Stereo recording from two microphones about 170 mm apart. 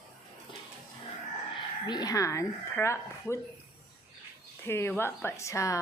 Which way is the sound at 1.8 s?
20° left (ahead or behind).